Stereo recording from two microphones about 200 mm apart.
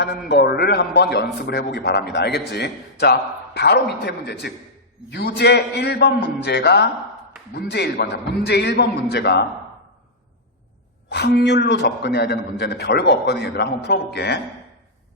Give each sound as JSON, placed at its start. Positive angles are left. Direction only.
{"t": 0.0, "sound": "a man's voice", "side_deg": 55}
{"t": 11.1, "sound": "a man's voice", "side_deg": 55}